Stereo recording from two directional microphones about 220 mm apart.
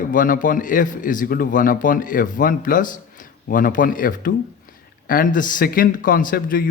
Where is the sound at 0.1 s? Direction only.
40° left (ahead or behind).